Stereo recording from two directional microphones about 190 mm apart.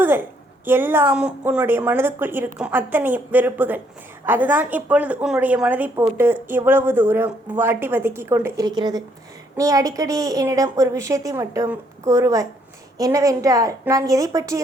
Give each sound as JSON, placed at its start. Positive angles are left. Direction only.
{"t": 0.0, "sound": "a woman's voice", "side_deg": -10}